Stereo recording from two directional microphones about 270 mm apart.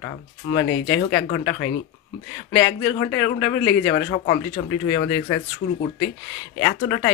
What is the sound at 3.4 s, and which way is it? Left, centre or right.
Speech, left.